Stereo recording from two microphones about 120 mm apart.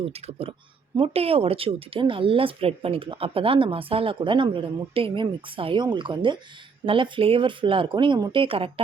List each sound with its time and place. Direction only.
0.0 s speech: 55° right (ahead or behind)